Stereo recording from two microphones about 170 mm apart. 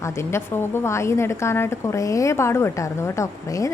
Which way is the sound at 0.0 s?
15° left (ahead or behind).